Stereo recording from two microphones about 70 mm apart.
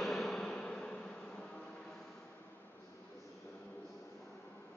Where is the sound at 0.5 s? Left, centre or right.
Centre.